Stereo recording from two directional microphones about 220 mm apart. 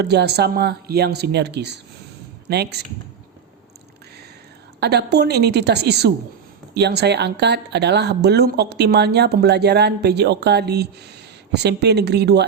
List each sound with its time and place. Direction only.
0.0 s a woman's voice: 50° right (ahead or behind)
4.8 s a woman's voice: 50° right (ahead or behind)